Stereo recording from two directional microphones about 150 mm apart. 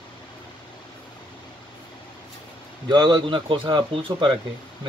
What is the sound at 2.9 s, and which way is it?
Speech, 30° right (ahead or behind).